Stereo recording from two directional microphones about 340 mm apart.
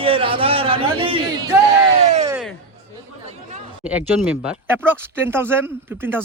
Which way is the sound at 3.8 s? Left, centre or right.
Centre.